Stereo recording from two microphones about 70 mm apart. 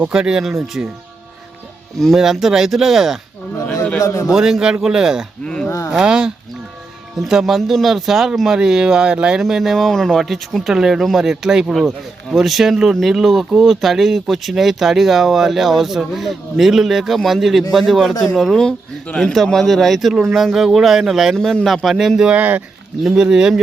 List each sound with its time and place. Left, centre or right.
0.1 s speech: centre
2.0 s speech: centre
4.0 s a man's voice: left
4.3 s speech: centre
9.4 s speech: centre
21.3 s speech: centre
22.4 s speech: right
23.0 s speech: centre